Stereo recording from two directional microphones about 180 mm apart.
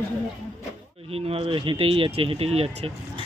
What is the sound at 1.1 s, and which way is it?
Speech, 35° right (ahead or behind).